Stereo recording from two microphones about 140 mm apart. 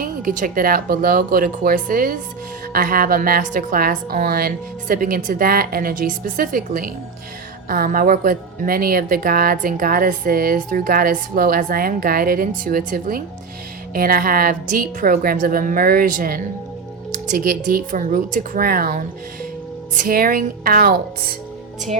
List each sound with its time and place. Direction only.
0.0 s a woman's voice: 80° right